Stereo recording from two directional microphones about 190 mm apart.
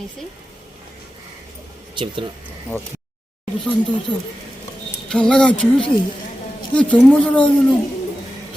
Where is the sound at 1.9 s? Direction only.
25° right (ahead or behind).